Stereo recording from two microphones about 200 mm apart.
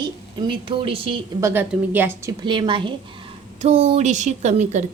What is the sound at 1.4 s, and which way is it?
A woman's voice, 10° right (ahead or behind).